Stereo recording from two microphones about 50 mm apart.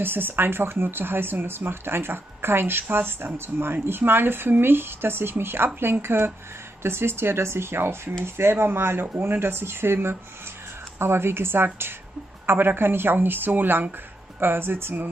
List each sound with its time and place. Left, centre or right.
0.0 s speech: right